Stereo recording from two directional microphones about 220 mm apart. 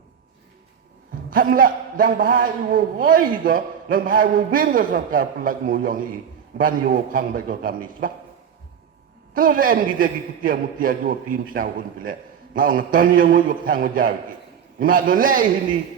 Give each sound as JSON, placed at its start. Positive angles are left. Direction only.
{"t": 1.3, "sound": "a man's voice", "side_deg": -40}
{"t": 9.3, "sound": "a man's voice", "side_deg": -40}